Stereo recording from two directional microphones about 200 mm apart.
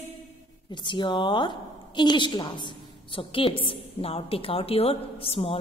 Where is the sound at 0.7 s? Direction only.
25° left (ahead or behind).